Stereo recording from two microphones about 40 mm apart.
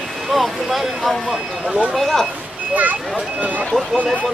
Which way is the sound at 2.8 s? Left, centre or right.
Right.